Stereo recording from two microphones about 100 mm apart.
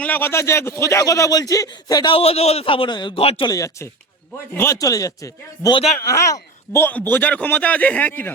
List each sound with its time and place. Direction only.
0.0 s speech: 20° left (ahead or behind); by 2.1 s 45° left (ahead or behind)
2.1 s a man's voice: 85° left; by 3.2 s 50° left (ahead or behind)
3.2 s speech: 70° left (ahead or behind)
3.4 s speech: 35° left (ahead or behind)
6.8 s a man's voice: 20° left (ahead or behind)